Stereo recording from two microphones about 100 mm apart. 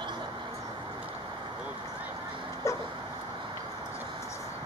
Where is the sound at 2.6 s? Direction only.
30° left (ahead or behind).